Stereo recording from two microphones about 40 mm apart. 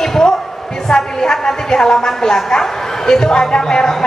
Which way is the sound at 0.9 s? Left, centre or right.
Centre.